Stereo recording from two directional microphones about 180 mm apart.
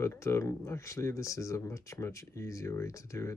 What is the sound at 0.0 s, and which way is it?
Speech, 15° left (ahead or behind).